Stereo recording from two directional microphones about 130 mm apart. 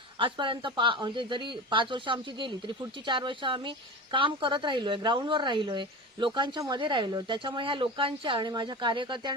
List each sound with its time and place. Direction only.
0.2 s speech: 40° right (ahead or behind)